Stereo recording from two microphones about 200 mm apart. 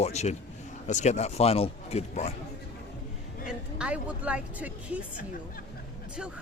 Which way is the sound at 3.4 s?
5° right (ahead or behind).